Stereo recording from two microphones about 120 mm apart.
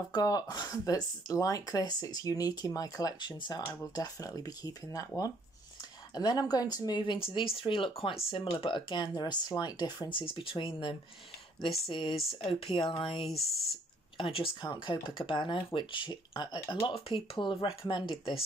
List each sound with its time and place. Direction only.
0.1 s speech: 30° left (ahead or behind)